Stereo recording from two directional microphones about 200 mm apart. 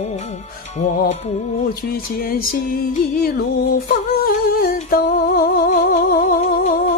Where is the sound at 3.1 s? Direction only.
45° left (ahead or behind).